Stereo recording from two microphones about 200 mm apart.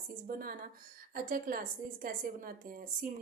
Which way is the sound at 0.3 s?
45° right (ahead or behind).